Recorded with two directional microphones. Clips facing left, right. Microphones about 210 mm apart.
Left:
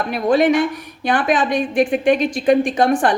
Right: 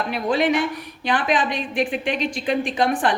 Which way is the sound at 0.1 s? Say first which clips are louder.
Left 6 dB; 45° left (ahead or behind).